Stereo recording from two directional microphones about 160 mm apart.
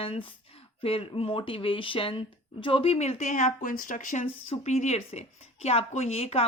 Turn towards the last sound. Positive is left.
turn(degrees=40)  # may be behind; listen again after turning